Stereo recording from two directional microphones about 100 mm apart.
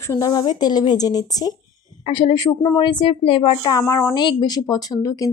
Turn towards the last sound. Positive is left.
turn(degrees=35)  # may be behind; listen again after turning